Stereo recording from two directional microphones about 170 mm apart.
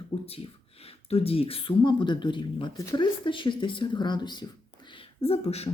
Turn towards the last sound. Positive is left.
turn(degrees=40)  # may be behind; listen again after turning